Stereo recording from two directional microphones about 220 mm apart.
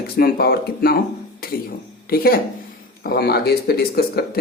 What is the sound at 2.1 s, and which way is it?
A man's voice, 45° left (ahead or behind).